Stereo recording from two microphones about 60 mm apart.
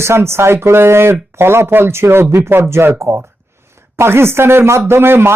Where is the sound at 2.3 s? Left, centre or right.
Right.